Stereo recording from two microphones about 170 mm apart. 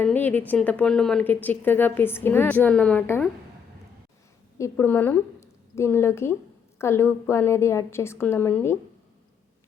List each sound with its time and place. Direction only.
0.0 s speech: 10° left (ahead or behind)
4.5 s a woman's voice: 15° left (ahead or behind)